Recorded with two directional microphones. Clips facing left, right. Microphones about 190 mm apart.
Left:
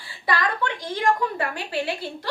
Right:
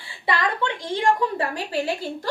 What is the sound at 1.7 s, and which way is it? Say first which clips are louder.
Speech: right 2 dB; 40° right (ahead or behind).